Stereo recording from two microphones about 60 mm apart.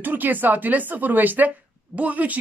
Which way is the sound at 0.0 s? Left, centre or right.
Right.